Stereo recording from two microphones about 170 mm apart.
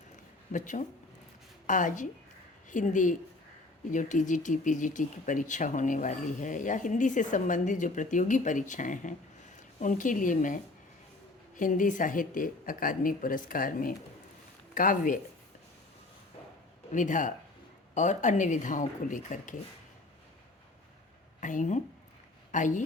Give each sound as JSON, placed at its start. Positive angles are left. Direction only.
{"t": 0.5, "sound": "a woman's voice", "side_deg": 50}
{"t": 16.9, "sound": "speech", "side_deg": 50}
{"t": 21.4, "sound": "speech", "side_deg": 50}